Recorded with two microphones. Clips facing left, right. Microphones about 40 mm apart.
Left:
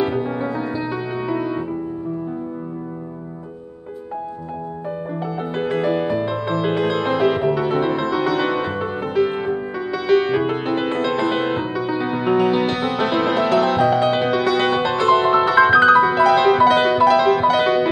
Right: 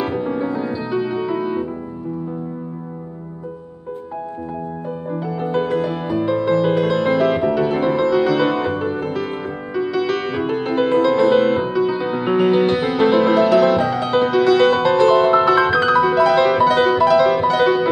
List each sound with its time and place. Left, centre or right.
0.0 s music: centre
5.4 s music: centre
12.4 s music: centre
13.3 s music: centre
13.8 s music: left; by 15.6 s centre
15.6 s music: left